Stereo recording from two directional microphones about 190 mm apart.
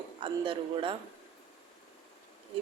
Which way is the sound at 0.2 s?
25° right (ahead or behind).